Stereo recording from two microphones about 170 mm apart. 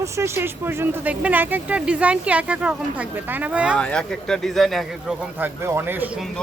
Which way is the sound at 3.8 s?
5° left (ahead or behind).